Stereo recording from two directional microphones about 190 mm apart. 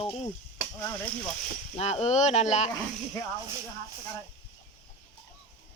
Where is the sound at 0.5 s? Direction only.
15° left (ahead or behind).